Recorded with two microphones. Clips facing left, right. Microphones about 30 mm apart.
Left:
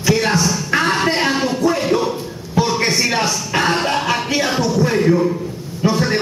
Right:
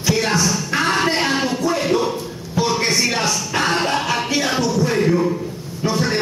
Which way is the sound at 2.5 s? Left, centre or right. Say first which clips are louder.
Left 2 dB; centre.